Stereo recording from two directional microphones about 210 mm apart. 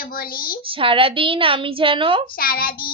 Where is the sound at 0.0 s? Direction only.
45° left (ahead or behind).